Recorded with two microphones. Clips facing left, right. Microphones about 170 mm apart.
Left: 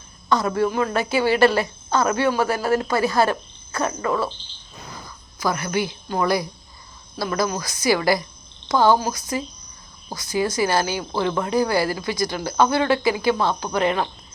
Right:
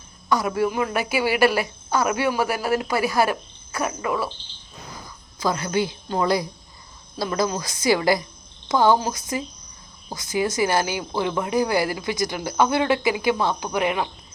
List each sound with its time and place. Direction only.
0.3 s a woman's voice: 10° right (ahead or behind)
5.4 s a woman's voice: 25° right (ahead or behind)